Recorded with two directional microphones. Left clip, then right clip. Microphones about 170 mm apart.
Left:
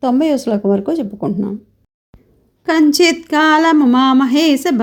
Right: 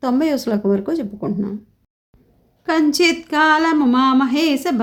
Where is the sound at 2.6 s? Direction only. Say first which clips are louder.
Left 4 dB; 30° left (ahead or behind).